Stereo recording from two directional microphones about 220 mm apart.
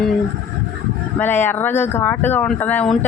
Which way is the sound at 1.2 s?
10° left (ahead or behind).